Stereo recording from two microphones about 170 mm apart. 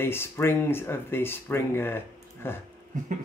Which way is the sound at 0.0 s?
15° left (ahead or behind).